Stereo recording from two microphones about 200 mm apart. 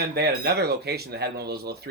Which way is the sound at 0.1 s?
55° right (ahead or behind).